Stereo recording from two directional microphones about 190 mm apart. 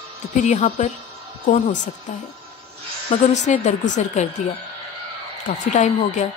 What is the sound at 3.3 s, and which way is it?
Speech, 40° left (ahead or behind).